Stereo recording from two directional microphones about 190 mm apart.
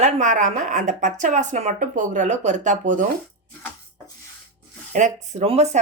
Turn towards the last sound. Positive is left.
turn(degrees=-35)  # may be behind; listen again after turning